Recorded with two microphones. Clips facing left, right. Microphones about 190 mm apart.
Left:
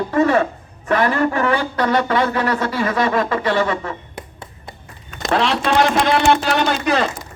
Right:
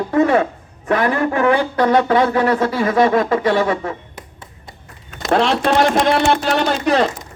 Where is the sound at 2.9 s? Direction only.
55° right (ahead or behind).